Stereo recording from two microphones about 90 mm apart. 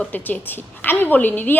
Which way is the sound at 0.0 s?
20° left (ahead or behind).